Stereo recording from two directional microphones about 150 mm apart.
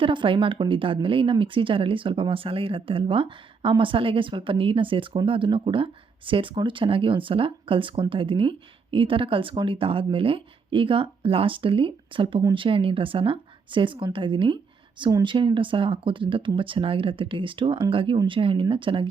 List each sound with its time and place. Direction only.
0.0 s speech: 35° right (ahead or behind)